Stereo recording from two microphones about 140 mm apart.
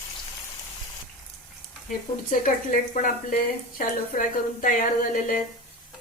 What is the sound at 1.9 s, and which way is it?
A woman's voice, 75° left (ahead or behind).